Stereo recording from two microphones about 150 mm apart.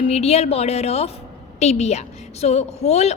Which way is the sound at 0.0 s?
45° left (ahead or behind).